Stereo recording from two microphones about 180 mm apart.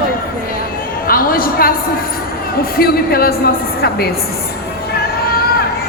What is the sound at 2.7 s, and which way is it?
Speech, 55° left (ahead or behind).